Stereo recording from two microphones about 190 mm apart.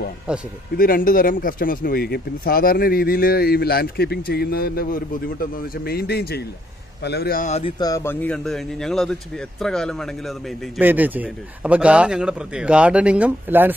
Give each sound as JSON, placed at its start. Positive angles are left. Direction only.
{"t": 0.3, "sound": "speech", "side_deg": -5}
{"t": 0.7, "sound": "speech", "side_deg": 50}
{"t": 7.8, "sound": "speech", "side_deg": 15}
{"t": 10.8, "sound": "speech", "side_deg": -10}